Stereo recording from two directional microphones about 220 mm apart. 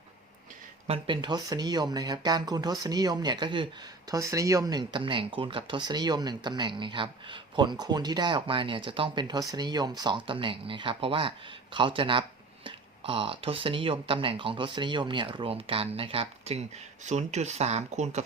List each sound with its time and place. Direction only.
0.9 s speech: 25° right (ahead or behind)